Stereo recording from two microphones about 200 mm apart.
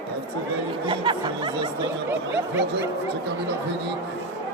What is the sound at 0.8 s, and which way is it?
Music, 25° right (ahead or behind).